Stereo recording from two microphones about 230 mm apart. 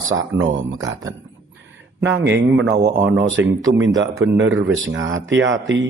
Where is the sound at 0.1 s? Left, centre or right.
Right.